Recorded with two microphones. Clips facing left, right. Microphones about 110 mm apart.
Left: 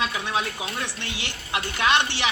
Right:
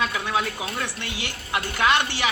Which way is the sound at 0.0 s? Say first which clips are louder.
Right 2 dB; 20° left (ahead or behind).